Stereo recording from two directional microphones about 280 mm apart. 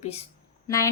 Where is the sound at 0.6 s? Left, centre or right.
Centre.